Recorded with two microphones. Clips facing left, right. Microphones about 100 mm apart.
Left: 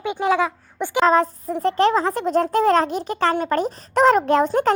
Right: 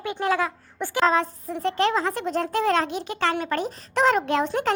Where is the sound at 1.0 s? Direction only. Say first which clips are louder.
Left 5 dB; 40° left (ahead or behind).